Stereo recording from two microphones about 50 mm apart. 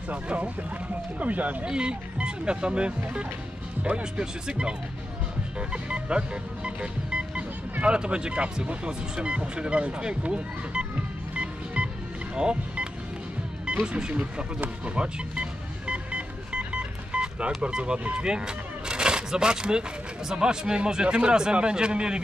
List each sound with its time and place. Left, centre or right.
0.1 s speech: right
1.7 s speech: centre
11.3 s music: right
12.4 s speech: centre
13.9 s speech: centre
15.9 s music: right
17.6 s speech: centre